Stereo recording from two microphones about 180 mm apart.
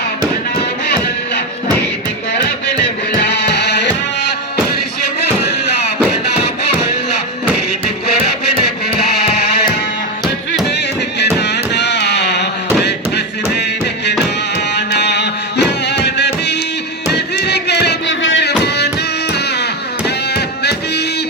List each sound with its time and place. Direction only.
3.2 s music: 75° left (ahead or behind)
9.2 s music: 35° left (ahead or behind)
10.7 s music: 65° left (ahead or behind)
12.8 s thump: 65° left (ahead or behind)
14.7 s music: 65° left (ahead or behind)